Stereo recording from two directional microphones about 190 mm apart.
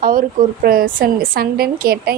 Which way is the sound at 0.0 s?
45° right (ahead or behind).